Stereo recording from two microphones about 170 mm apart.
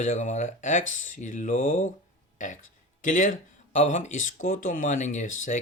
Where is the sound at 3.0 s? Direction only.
50° left (ahead or behind).